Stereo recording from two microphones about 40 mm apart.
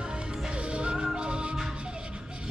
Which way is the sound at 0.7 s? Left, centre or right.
Right.